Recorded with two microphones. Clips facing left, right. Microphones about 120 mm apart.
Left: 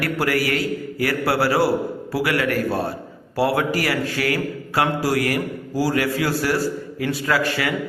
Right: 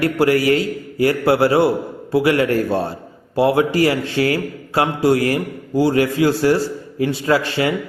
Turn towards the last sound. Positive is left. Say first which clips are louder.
# right 4 dB
turn(degrees=-25)  # may be behind; listen again after turning